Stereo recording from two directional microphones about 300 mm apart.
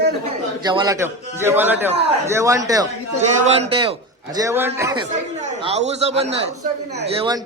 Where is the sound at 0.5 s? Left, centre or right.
Centre.